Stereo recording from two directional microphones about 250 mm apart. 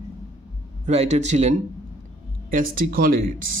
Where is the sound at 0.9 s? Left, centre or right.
Right.